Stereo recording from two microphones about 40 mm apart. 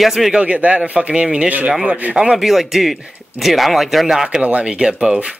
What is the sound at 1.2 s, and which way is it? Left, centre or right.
Speech, centre.